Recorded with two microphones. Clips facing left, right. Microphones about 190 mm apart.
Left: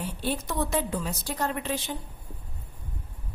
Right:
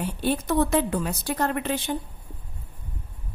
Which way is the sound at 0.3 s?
60° right (ahead or behind).